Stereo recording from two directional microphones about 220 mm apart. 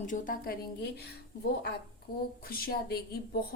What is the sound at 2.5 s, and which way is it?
Speech, 40° left (ahead or behind).